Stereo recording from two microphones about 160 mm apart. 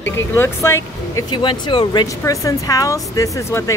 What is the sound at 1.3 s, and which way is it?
Speech, 30° left (ahead or behind).